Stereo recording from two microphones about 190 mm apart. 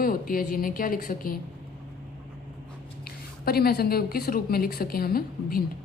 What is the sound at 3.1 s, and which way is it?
A woman's voice, 55° left (ahead or behind).